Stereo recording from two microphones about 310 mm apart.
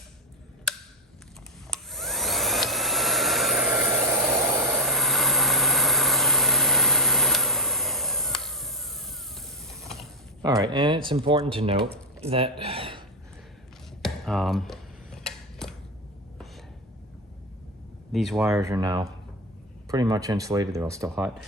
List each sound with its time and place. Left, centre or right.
0.7 s tick: centre
1.7 s hair dryer: centre
10.4 s speech: centre
14.0 s a sound: centre
18.1 s speech: centre